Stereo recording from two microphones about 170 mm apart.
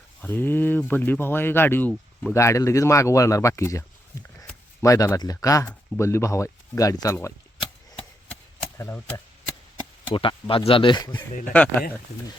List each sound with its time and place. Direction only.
0.2 s speech: 10° left (ahead or behind)
8.8 s speech: 15° left (ahead or behind)
10.1 s speech: 30° left (ahead or behind)